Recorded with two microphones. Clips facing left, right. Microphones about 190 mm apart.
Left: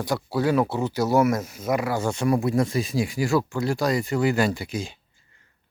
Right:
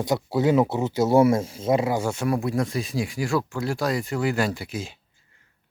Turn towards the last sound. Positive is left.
turn(degrees=-5)  # may be behind; listen again after turning